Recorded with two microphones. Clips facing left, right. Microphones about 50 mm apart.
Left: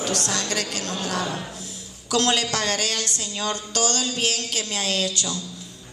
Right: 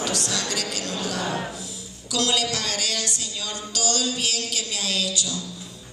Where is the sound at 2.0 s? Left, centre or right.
Left.